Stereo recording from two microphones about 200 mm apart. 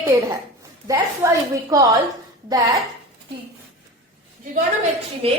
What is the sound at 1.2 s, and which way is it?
Speech, 15° right (ahead or behind).